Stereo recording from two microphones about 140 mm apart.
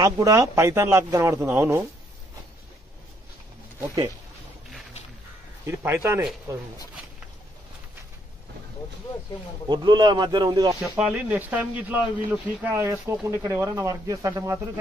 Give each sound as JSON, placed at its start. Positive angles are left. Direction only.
{"t": 0.0, "sound": "speech", "side_deg": -25}
{"t": 3.8, "sound": "speech", "side_deg": -25}
{"t": 5.7, "sound": "speech", "side_deg": -20}
{"t": 9.7, "sound": "speech", "side_deg": -30}
{"t": 10.8, "sound": "speech", "side_deg": -5}